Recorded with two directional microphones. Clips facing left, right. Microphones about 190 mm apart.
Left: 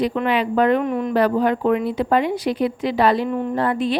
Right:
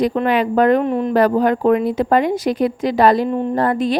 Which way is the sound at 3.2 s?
30° right (ahead or behind).